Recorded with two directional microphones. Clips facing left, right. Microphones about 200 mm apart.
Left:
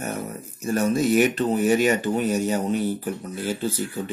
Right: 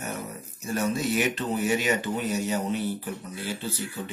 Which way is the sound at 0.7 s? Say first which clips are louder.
Left 6 dB; 45° left (ahead or behind).